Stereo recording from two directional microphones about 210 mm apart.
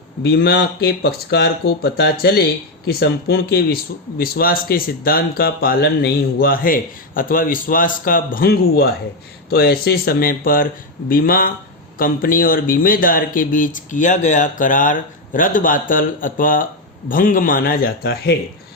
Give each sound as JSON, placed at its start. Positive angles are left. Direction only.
{"t": 0.2, "sound": "speech", "side_deg": 50}